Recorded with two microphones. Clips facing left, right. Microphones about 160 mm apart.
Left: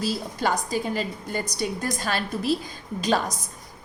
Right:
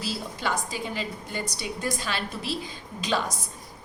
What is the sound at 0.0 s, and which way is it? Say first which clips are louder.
A woman's voice: left 5 dB; 45° left (ahead or behind).